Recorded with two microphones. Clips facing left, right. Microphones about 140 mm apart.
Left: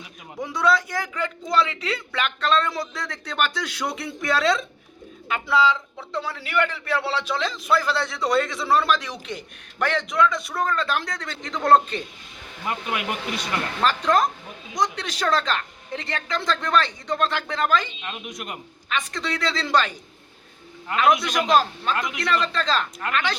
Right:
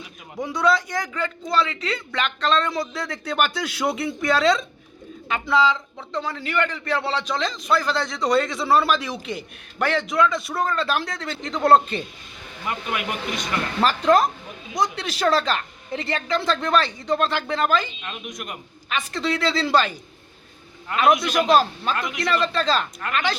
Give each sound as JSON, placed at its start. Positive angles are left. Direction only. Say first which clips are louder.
{"t": 0.3, "sound": "a man's voice", "louder": "right 1 dB", "side_deg": 0}
{"t": 12.6, "sound": "speech", "louder": "even", "side_deg": 25}
{"t": 13.8, "sound": "a man's voice", "louder": "right 3 dB", "side_deg": -10}
{"t": 18.0, "sound": "speech", "louder": "even", "side_deg": 25}
{"t": 18.9, "sound": "speech", "louder": "right 3 dB", "side_deg": -5}
{"t": 21.4, "sound": "a man's voice", "louder": "even", "side_deg": -5}